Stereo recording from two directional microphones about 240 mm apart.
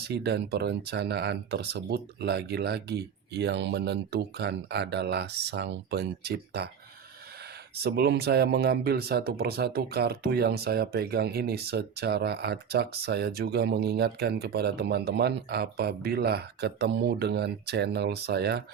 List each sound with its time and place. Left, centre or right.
0.0 s speech: right
7.8 s speech: right